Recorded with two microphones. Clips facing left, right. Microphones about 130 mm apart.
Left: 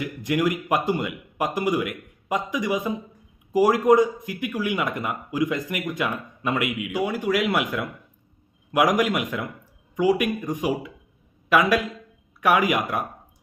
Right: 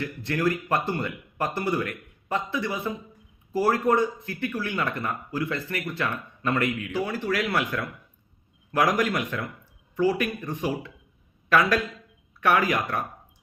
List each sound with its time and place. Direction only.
0.0 s speech: 15° left (ahead or behind)